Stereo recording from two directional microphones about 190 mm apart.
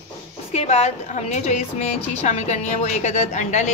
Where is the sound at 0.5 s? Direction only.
35° left (ahead or behind).